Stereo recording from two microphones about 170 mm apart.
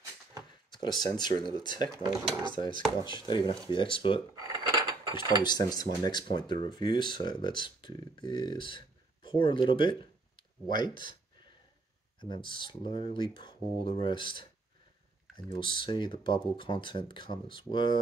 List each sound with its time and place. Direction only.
0.7 s speech: 25° left (ahead or behind)
4.4 s dishes: 20° right (ahead or behind)
5.4 s speech: 25° left (ahead or behind)
12.2 s speech: 30° left (ahead or behind)